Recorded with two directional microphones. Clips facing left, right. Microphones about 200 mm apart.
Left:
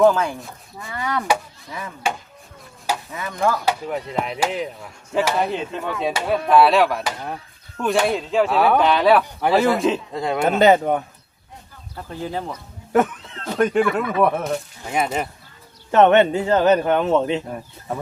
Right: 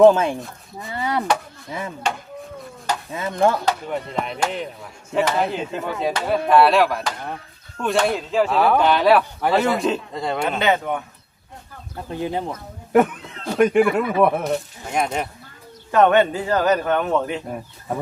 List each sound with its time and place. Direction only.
0.0 s speech: 25° right (ahead or behind)
2.0 s speech: 10° left (ahead or behind)
3.1 s speech: 25° right (ahead or behind)
3.7 s speech: 5° left (ahead or behind)
10.6 s speech: 40° left (ahead or behind)
12.2 s speech: 20° right (ahead or behind)
12.9 s speech: 10° right (ahead or behind)
15.9 s a man's voice: 25° left (ahead or behind)
17.5 s speech: 10° right (ahead or behind)